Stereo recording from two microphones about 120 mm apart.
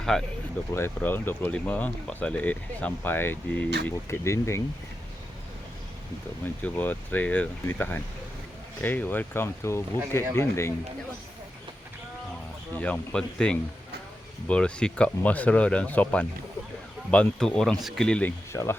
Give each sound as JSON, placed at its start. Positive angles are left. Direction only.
{"t": 0.0, "sound": "speech", "side_deg": 5}
{"t": 0.8, "sound": "speech", "side_deg": 20}
{"t": 6.6, "sound": "speech", "side_deg": 15}
{"t": 12.7, "sound": "speech", "side_deg": 15}
{"t": 18.5, "sound": "speech", "side_deg": 25}